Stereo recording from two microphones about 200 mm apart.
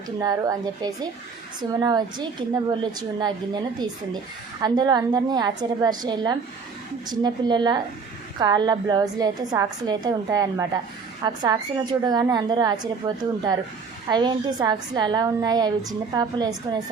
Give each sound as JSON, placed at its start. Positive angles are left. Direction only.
{"t": 0.2, "sound": "a woman's voice", "side_deg": -15}